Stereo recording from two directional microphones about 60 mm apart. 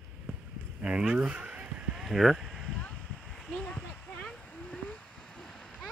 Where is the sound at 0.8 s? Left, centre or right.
Centre.